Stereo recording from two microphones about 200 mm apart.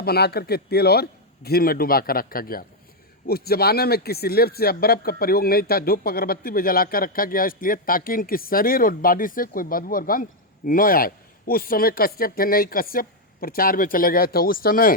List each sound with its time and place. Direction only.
0.0 s speech: 50° left (ahead or behind)